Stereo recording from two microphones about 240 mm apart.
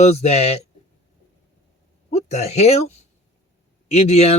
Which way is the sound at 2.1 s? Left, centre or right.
Left.